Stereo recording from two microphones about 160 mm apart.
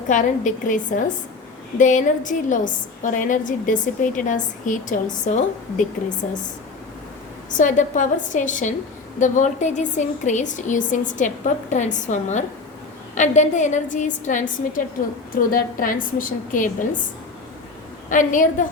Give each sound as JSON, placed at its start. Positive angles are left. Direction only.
{"t": 0.1, "sound": "a woman's voice", "side_deg": 50}
{"t": 7.5, "sound": "a woman's voice", "side_deg": 55}
{"t": 18.1, "sound": "a woman's voice", "side_deg": 55}